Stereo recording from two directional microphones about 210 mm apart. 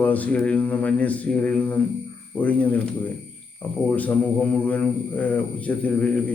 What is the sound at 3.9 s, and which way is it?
Speech, 5° left (ahead or behind).